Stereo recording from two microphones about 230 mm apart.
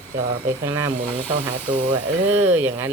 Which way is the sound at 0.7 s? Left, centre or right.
Centre.